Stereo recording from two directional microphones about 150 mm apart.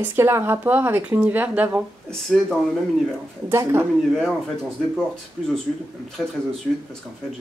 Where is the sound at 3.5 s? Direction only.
15° right (ahead or behind).